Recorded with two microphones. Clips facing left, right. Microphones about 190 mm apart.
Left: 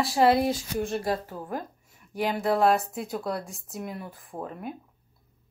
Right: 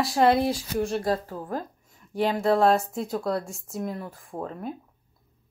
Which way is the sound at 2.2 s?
35° right (ahead or behind).